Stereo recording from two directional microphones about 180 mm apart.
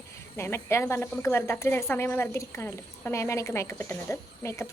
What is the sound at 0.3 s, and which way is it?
Speech, 15° left (ahead or behind).